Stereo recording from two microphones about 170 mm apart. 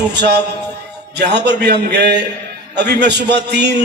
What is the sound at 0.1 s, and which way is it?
A man's voice, 80° right.